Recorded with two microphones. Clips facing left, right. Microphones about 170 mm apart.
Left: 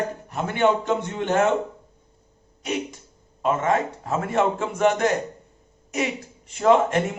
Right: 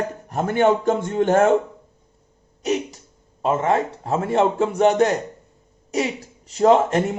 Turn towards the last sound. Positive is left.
turn(degrees=-35)  # may be behind; listen again after turning